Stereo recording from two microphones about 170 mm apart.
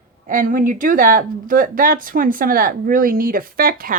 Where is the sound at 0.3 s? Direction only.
55° right (ahead or behind).